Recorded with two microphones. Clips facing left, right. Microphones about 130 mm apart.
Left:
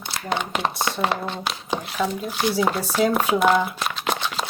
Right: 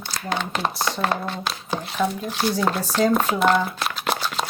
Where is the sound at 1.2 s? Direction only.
20° left (ahead or behind).